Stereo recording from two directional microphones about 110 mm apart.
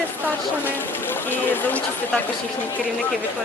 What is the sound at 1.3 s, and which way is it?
Speech, 15° left (ahead or behind).